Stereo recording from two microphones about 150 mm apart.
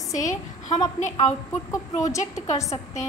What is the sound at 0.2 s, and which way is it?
A woman's voice, 50° left (ahead or behind).